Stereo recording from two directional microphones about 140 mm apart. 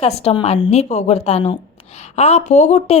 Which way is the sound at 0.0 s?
45° left (ahead or behind).